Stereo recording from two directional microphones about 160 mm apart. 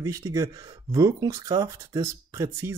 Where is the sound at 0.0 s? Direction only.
20° right (ahead or behind).